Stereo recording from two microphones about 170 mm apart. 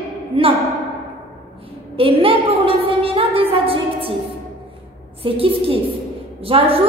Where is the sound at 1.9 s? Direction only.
30° right (ahead or behind).